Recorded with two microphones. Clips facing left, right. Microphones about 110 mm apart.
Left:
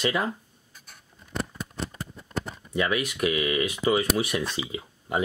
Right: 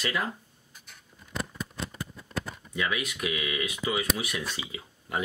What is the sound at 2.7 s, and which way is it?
Speech, 45° left (ahead or behind).